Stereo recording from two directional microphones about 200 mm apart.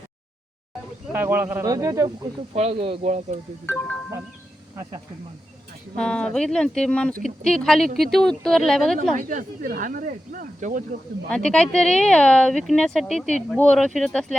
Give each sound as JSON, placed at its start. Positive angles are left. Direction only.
{"t": 1.1, "sound": "a man's voice", "side_deg": -10}
{"t": 2.6, "sound": "speech", "side_deg": -30}
{"t": 6.0, "sound": "speech", "side_deg": 5}
{"t": 9.1, "sound": "speech", "side_deg": -40}
{"t": 11.3, "sound": "speech", "side_deg": 5}